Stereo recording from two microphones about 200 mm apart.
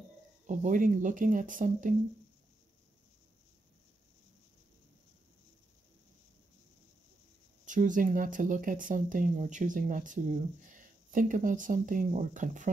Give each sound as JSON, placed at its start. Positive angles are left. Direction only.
{"t": 0.5, "sound": "speech", "side_deg": -40}
{"t": 7.6, "sound": "speech", "side_deg": -40}